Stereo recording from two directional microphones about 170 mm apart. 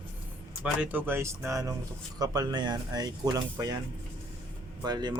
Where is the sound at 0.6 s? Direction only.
10° right (ahead or behind).